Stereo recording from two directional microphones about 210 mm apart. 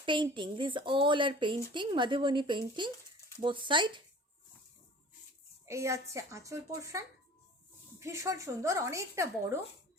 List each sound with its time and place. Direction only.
0.0 s speech: 25° right (ahead or behind)
5.6 s speech: 15° right (ahead or behind)